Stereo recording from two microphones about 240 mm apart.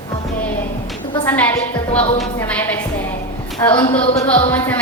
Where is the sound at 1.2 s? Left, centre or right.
Centre.